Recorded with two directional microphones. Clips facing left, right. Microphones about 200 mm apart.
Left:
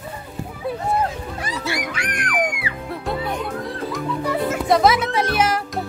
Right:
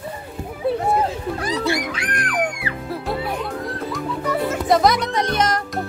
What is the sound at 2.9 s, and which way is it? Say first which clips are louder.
Music: even; 5° right (ahead or behind).